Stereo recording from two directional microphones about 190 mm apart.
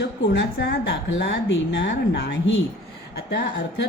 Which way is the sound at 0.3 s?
70° left (ahead or behind).